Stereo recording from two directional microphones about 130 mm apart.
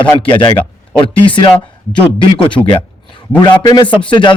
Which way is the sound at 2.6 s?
40° left (ahead or behind).